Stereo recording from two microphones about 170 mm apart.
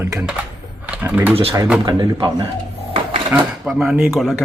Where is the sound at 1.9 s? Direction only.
25° right (ahead or behind).